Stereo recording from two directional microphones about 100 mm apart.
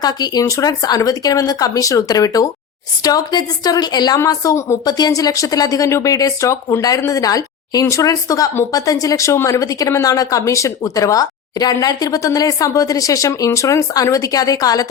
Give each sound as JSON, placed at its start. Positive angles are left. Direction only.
{"t": 0.0, "sound": "speech", "side_deg": 40}
{"t": 4.2, "sound": "speech", "side_deg": 30}